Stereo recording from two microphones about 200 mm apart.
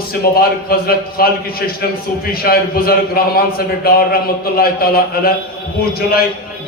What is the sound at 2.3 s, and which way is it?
A man's voice, 50° left (ahead or behind).